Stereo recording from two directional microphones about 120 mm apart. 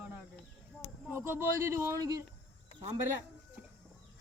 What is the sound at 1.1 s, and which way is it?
A man's voice, 20° right (ahead or behind).